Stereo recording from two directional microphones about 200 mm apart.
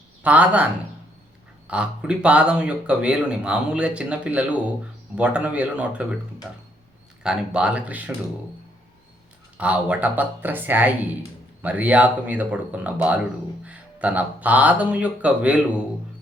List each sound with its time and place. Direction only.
0.2 s speech: 5° right (ahead or behind)
7.2 s speech: 5° right (ahead or behind)
9.6 s speech: 5° right (ahead or behind)